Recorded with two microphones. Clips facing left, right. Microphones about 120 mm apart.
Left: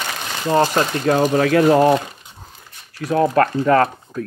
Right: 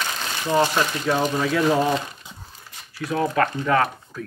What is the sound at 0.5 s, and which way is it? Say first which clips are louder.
Speech: left 4 dB; 45° left (ahead or behind).